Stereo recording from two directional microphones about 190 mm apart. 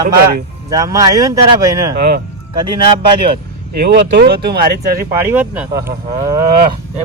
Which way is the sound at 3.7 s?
60° right (ahead or behind).